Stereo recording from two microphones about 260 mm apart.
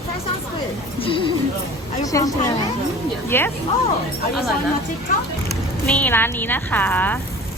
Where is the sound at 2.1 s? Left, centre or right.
Centre.